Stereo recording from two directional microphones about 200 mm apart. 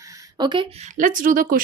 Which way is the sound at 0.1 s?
20° right (ahead or behind).